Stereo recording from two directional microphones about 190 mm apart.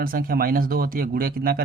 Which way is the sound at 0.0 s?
50° right (ahead or behind).